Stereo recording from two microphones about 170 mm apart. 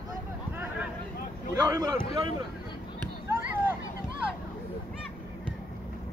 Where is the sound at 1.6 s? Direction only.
20° right (ahead or behind).